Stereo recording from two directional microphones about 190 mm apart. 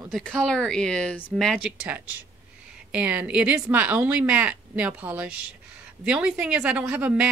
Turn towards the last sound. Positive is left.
turn(degrees=-5)  # may be behind; listen again after turning